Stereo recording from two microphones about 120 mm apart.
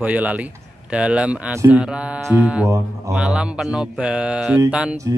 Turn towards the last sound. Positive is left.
turn(degrees=-10)  # may be behind; listen again after turning